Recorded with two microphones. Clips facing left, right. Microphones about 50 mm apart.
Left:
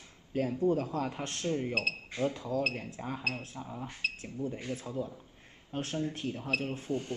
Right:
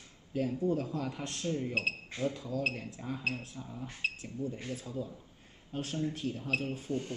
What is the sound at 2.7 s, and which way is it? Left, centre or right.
Speech, left.